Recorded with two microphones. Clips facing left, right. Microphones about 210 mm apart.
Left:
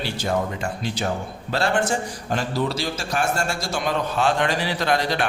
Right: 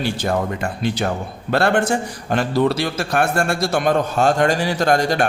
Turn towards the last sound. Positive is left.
turn(degrees=-45)  # may be behind; listen again after turning